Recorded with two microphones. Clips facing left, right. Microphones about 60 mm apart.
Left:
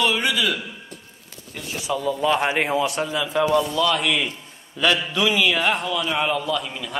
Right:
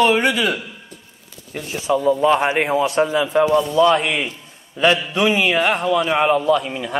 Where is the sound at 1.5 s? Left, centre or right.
Right.